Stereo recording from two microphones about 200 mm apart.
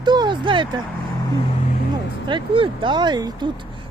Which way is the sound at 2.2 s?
25° right (ahead or behind).